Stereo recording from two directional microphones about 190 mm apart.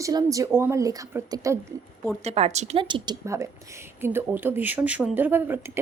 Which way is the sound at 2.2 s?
35° right (ahead or behind).